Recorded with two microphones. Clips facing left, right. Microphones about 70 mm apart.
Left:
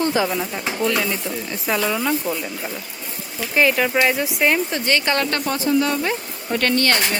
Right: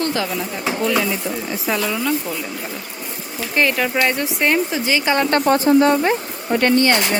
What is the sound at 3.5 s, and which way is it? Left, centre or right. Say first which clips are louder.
Speech: left 1 dB; centre.